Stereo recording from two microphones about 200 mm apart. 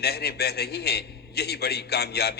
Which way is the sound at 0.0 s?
55° left (ahead or behind).